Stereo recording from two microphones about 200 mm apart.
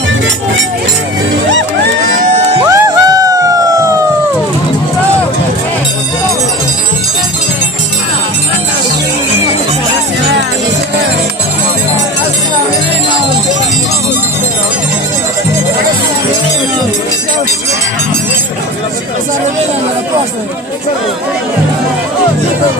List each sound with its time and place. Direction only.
2.2 s crowd: 40° right (ahead or behind)
2.6 s music: 15° right (ahead or behind)